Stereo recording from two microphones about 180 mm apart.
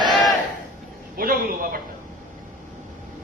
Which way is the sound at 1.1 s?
55° right (ahead or behind).